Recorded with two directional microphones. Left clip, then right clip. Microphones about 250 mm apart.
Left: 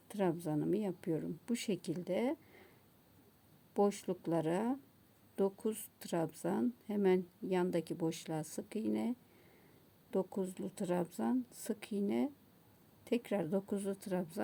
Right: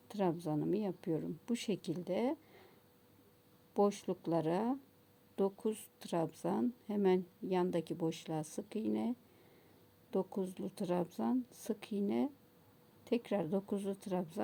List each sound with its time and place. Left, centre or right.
0.1 s speech: centre
3.8 s speech: centre